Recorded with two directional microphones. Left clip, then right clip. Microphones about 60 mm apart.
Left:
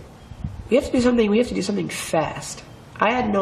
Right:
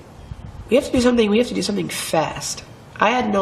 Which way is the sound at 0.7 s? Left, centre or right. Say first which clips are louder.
Right 2 dB; centre.